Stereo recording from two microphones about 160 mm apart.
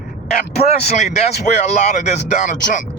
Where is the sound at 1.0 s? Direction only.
45° left (ahead or behind).